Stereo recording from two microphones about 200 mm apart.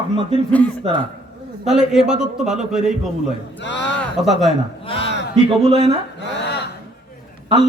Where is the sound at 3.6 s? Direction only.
60° left (ahead or behind).